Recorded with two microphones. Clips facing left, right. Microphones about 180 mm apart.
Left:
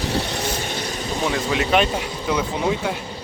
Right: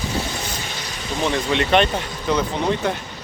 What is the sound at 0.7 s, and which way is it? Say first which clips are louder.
Vehicle: left 5 dB; 45° left (ahead or behind).